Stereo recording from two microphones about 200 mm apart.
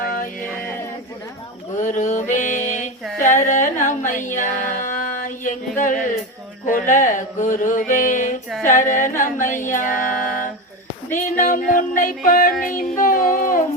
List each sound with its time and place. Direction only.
0.0 s music: 45° left (ahead or behind)
1.8 s music: 40° left (ahead or behind)
2.6 s a sound: 35° left (ahead or behind)
3.2 s music: 40° left (ahead or behind)
6.7 s mantra: 40° left (ahead or behind)
11.1 s music: 40° left (ahead or behind)
13.0 s mantra: 40° left (ahead or behind)